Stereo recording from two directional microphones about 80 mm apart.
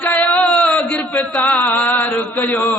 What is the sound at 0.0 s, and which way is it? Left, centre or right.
Music, left.